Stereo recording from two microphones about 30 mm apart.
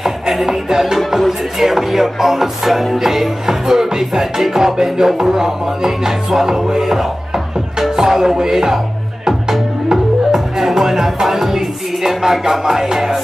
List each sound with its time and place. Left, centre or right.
0.0 s music: centre
0.5 s music: centre
1.6 s music: centre